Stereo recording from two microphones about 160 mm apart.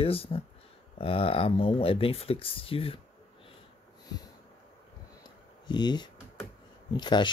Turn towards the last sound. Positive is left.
turn(degrees=30)  # may be behind; listen again after turning